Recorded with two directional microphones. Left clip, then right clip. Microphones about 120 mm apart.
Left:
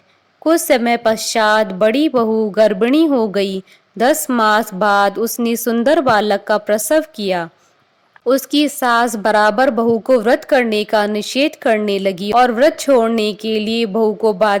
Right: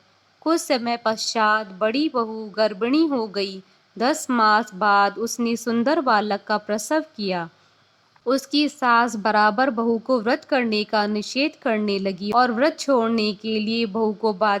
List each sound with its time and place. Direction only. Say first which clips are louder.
0.4 s a woman's voice: left 8 dB; 45° left (ahead or behind)